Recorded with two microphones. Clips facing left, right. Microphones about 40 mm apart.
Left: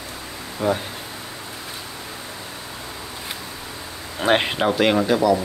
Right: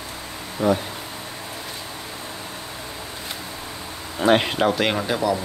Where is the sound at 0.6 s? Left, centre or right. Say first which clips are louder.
Right 2 dB; centre.